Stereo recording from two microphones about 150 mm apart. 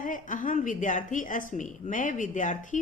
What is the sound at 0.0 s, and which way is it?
Speech, 60° left (ahead or behind).